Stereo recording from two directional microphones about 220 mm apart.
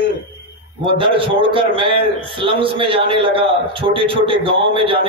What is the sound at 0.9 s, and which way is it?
A man's voice, 25° right (ahead or behind).